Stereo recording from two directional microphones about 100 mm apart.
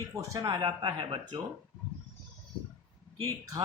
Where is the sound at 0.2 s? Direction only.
35° right (ahead or behind).